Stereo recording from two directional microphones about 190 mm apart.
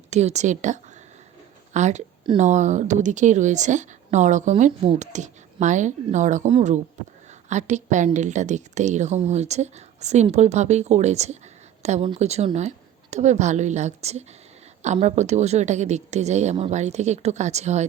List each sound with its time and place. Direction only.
0.1 s a woman's voice: 35° right (ahead or behind)